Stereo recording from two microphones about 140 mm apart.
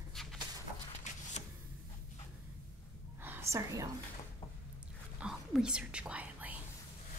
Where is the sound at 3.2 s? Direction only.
15° right (ahead or behind).